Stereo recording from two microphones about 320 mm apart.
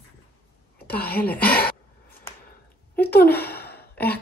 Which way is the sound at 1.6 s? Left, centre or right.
Left.